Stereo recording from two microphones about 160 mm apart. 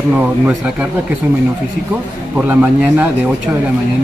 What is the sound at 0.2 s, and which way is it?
Speech, 10° right (ahead or behind).